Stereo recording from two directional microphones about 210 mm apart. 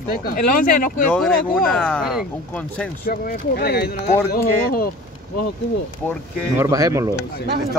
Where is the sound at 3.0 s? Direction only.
45° left (ahead or behind).